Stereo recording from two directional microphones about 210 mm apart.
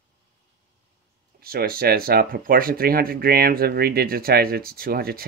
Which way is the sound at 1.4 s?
45° right (ahead or behind).